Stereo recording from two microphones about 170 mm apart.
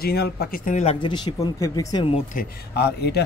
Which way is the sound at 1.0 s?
25° left (ahead or behind).